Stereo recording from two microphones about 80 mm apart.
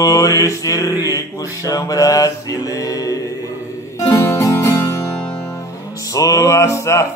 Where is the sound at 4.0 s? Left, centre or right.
Left.